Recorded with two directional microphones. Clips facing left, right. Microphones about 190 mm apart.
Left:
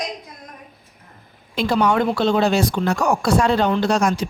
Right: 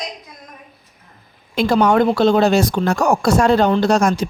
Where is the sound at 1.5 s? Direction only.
50° right (ahead or behind).